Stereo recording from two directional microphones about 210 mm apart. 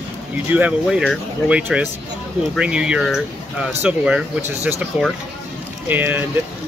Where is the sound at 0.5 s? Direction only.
5° right (ahead or behind).